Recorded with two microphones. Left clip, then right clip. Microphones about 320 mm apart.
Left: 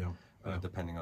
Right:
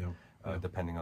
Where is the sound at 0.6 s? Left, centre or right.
Right.